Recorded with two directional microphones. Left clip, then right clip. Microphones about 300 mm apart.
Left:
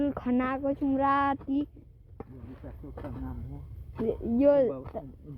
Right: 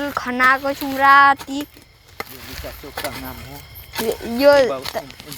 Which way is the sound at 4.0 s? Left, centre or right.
Right.